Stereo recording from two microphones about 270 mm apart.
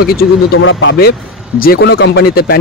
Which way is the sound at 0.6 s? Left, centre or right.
Left.